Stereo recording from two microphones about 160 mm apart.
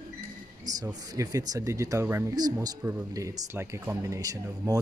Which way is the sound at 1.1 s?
20° right (ahead or behind).